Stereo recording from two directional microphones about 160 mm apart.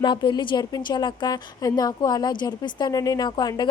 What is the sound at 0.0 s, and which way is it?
A woman's voice, 30° left (ahead or behind).